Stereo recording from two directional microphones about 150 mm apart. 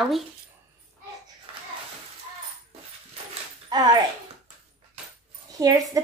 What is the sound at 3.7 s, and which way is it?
Speech, 25° right (ahead or behind).